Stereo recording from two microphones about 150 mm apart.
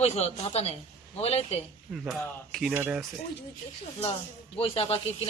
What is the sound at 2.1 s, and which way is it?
Speech, centre (ahead or behind).